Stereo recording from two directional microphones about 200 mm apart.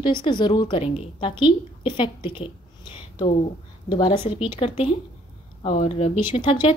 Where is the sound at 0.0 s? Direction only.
25° left (ahead or behind).